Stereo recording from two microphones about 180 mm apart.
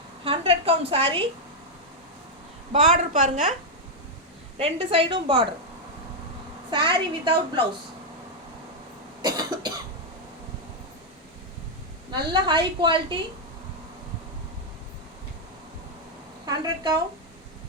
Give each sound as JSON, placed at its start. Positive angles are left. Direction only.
{"t": 0.3, "sound": "a woman's voice", "side_deg": -30}
{"t": 2.7, "sound": "a woman's voice", "side_deg": -40}
{"t": 4.5, "sound": "a woman's voice", "side_deg": -30}
{"t": 6.8, "sound": "a woman's voice", "side_deg": -30}
{"t": 9.2, "sound": "cough", "side_deg": -20}
{"t": 12.1, "sound": "a woman's voice", "side_deg": -25}
{"t": 16.5, "sound": "a woman's voice", "side_deg": -20}